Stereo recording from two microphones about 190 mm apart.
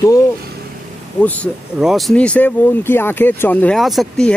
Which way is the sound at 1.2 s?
10° left (ahead or behind).